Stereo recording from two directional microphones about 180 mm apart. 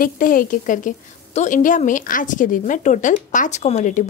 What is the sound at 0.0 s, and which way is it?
A woman's voice, 50° left (ahead or behind).